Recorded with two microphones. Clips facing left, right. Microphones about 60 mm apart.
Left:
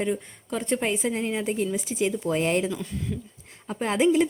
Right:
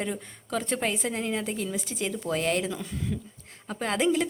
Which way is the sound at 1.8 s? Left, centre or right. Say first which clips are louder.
Left 5 dB; centre.